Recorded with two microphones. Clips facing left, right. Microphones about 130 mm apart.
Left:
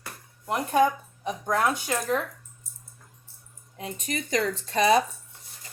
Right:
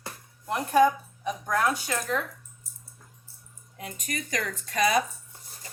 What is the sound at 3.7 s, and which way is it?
Speech, 25° left (ahead or behind).